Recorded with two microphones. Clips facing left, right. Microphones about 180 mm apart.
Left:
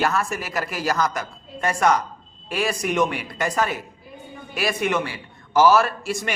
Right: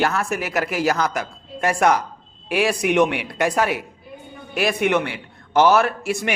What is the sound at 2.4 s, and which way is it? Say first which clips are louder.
Speech: right 4 dB; 70° right (ahead or behind).